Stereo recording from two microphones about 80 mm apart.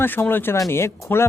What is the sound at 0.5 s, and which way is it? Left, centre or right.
Speech, left.